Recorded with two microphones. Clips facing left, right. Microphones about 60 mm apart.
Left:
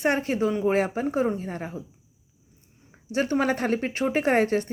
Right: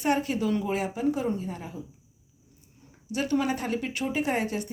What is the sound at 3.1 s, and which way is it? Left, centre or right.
Speech, left.